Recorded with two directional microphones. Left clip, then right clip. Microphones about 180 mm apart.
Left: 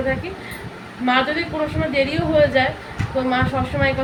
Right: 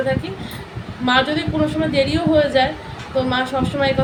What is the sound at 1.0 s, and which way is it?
Speech, 20° right (ahead or behind).